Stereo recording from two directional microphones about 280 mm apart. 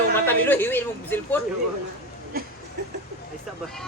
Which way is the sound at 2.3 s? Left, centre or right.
Right.